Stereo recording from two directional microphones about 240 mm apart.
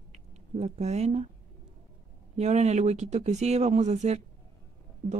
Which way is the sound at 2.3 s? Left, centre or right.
Right.